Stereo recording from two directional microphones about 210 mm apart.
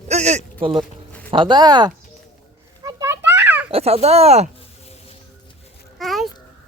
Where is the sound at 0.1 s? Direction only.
35° right (ahead or behind).